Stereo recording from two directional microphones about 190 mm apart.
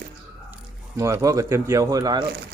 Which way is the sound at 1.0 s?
15° right (ahead or behind).